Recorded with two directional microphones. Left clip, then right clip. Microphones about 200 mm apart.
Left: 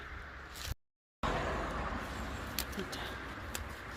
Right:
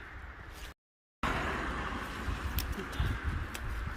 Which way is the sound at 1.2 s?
55° right (ahead or behind).